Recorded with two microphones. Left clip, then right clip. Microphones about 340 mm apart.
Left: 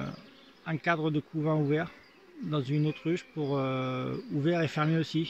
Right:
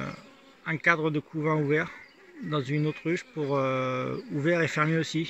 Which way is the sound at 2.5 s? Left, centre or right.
Centre.